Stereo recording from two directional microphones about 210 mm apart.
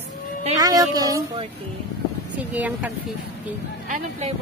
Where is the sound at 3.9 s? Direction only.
35° right (ahead or behind).